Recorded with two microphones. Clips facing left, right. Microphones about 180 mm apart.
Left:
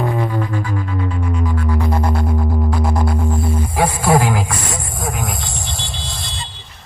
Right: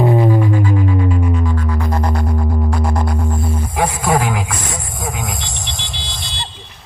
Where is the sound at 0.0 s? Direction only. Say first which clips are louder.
Right 6 dB; 20° right (ahead or behind).